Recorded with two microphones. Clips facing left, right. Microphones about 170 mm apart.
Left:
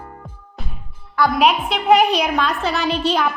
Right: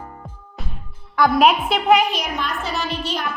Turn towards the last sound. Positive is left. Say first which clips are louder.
# left 6 dB
turn(degrees=65)  # may be behind; listen again after turning